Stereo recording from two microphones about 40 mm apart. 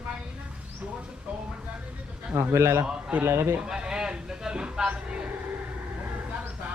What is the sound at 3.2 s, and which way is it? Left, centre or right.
Speech, right.